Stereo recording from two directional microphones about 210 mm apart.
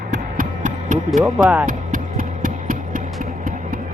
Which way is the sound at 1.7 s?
40° right (ahead or behind).